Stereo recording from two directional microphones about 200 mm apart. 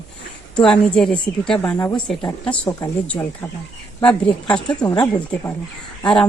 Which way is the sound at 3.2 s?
20° left (ahead or behind).